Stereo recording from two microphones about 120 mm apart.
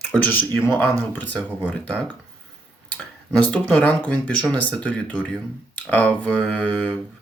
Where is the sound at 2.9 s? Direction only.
10° left (ahead or behind).